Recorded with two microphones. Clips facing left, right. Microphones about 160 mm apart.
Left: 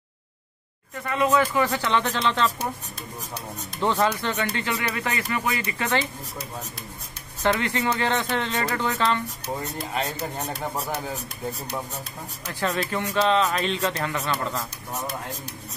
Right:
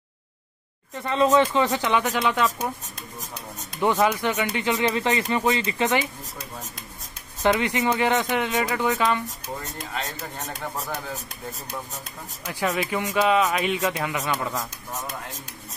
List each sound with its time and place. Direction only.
1.0 s speech: 25° right (ahead or behind)
3.8 s speech: 15° right (ahead or behind)
7.4 s speech: 15° right (ahead or behind)
12.4 s speech: 10° right (ahead or behind)